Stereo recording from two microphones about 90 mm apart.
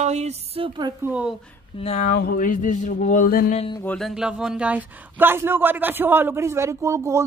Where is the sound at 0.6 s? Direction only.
90° right.